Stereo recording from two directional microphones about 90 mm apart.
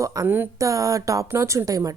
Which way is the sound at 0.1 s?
40° right (ahead or behind).